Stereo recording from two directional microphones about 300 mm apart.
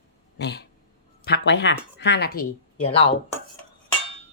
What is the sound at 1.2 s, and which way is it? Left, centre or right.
A woman's voice, left.